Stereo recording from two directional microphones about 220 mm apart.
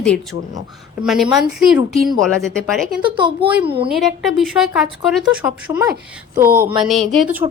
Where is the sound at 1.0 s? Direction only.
5° right (ahead or behind).